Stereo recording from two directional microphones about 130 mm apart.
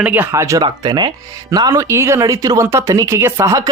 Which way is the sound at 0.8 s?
35° right (ahead or behind).